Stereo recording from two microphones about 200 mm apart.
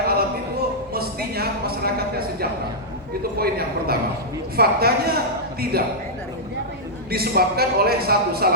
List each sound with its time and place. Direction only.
0.0 s a sound: 50° right (ahead or behind)
3.3 s a man's voice: 50° right (ahead or behind)
7.1 s a man's voice: 50° right (ahead or behind)